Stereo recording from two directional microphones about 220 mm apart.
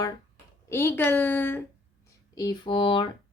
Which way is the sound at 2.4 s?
20° left (ahead or behind).